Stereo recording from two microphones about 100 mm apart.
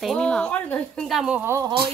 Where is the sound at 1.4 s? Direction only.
25° right (ahead or behind).